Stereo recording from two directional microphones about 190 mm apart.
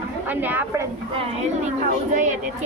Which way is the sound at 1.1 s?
30° right (ahead or behind).